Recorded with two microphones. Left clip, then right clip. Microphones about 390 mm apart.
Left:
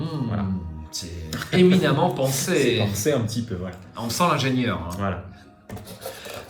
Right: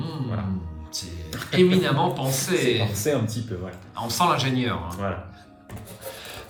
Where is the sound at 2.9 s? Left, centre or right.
Centre.